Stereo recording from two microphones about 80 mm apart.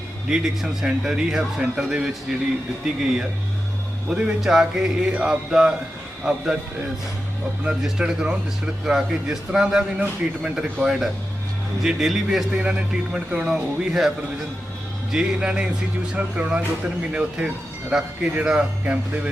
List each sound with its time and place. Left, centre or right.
0.3 s a man's voice: centre
4.1 s speech: centre
7.8 s a man's voice: centre
15.1 s speech: centre